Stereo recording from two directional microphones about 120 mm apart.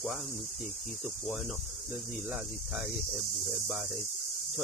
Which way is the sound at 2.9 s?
Centre (ahead or behind).